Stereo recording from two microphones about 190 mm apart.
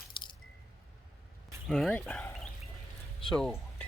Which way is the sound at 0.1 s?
25° left (ahead or behind).